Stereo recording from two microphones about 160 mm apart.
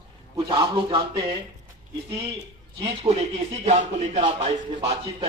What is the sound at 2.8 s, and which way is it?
Speech, 40° right (ahead or behind).